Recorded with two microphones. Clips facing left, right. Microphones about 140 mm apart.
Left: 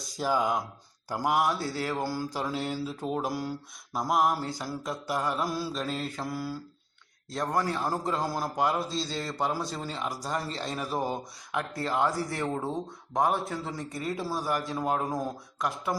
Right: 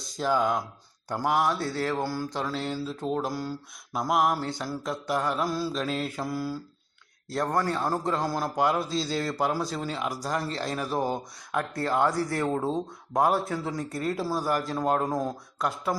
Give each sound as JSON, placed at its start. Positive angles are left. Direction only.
{"t": 0.2, "sound": "a man's voice", "side_deg": 5}
{"t": 2.0, "sound": "mantra", "side_deg": 25}
{"t": 2.3, "sound": "speech", "side_deg": 10}
{"t": 2.6, "sound": "a man's voice", "side_deg": 0}
{"t": 13.5, "sound": "a man's voice", "side_deg": 0}